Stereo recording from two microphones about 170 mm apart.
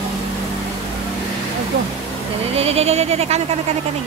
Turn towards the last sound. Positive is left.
turn(degrees=-40)  # may be behind; listen again after turning